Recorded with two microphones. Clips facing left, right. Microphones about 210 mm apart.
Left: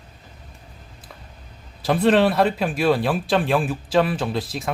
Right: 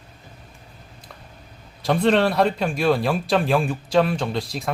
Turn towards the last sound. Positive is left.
turn(degrees=0)  # may be behind; listen again after turning